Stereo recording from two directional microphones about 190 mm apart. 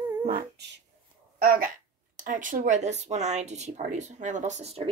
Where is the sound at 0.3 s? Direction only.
50° right (ahead or behind).